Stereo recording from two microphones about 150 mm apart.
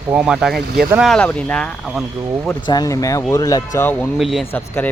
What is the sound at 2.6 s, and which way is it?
Speech, 25° left (ahead or behind).